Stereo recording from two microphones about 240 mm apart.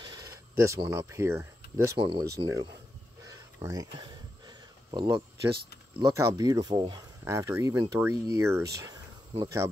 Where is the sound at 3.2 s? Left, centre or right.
Centre.